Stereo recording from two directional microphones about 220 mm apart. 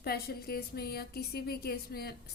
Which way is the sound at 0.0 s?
45° left (ahead or behind).